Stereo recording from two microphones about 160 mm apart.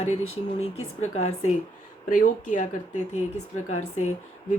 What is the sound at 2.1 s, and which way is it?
Speech, 55° left (ahead or behind).